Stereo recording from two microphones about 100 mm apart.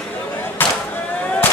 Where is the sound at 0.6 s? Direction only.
20° left (ahead or behind).